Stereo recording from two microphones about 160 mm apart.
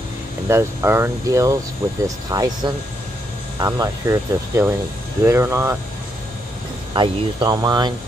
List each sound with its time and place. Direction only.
0.5 s speech: 15° right (ahead or behind)
6.9 s speech: 30° right (ahead or behind)